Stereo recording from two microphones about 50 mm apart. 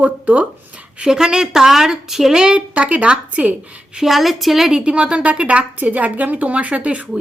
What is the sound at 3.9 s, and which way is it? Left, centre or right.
Speech, centre.